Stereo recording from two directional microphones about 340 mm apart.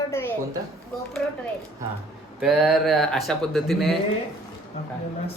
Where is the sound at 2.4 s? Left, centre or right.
Centre.